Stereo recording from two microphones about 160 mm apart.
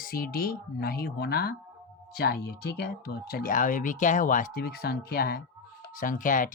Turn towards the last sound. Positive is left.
turn(degrees=55)  # may be behind; listen again after turning